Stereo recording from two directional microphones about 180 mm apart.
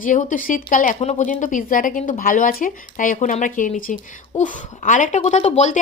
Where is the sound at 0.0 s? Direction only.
45° left (ahead or behind).